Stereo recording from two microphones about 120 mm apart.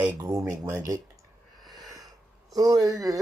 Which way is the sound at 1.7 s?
30° right (ahead or behind).